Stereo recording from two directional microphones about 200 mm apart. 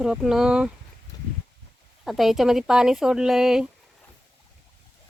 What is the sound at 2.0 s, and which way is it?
Speech, centre (ahead or behind).